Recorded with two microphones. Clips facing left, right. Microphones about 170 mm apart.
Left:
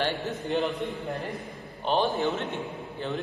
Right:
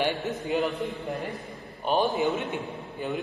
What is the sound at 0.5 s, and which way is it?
A man's voice, centre (ahead or behind).